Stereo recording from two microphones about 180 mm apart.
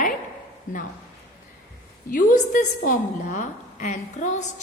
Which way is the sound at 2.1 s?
50° left (ahead or behind).